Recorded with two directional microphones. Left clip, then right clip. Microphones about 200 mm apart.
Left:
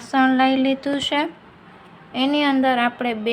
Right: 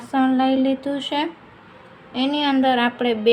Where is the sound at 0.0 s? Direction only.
Centre (ahead or behind).